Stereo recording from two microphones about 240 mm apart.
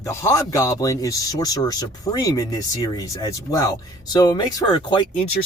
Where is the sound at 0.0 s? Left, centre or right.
Centre.